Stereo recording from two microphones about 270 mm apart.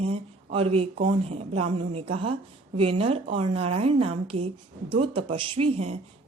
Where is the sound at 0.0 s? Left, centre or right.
Right.